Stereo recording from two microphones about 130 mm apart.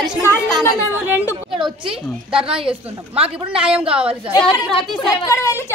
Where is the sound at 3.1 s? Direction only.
50° right (ahead or behind).